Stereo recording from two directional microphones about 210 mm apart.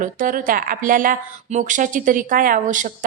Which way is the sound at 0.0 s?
40° right (ahead or behind).